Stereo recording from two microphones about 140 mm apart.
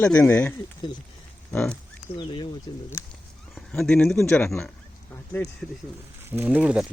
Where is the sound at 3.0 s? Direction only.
20° left (ahead or behind).